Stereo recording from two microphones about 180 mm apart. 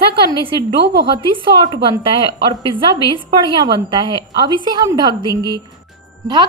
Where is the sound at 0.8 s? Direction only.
70° right (ahead or behind).